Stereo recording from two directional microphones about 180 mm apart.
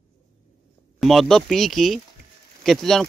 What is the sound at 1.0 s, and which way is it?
Speech, centre (ahead or behind).